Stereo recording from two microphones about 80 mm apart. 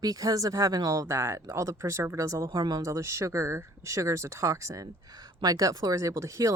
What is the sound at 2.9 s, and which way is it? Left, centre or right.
Speech, right.